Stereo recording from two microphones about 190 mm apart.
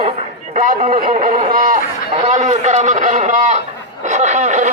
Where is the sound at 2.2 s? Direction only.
40° right (ahead or behind).